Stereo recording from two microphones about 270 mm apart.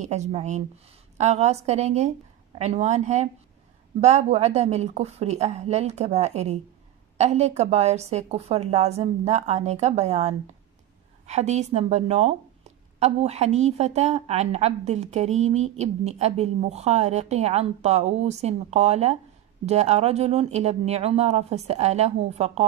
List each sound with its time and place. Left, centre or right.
0.0 s a woman's voice: right